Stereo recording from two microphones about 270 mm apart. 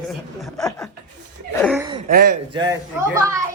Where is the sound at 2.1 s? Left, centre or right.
Right.